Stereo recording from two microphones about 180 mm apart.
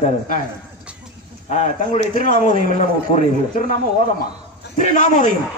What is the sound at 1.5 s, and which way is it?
A man's voice, 40° left (ahead or behind).